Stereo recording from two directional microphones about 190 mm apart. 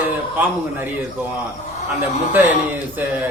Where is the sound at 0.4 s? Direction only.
10° right (ahead or behind).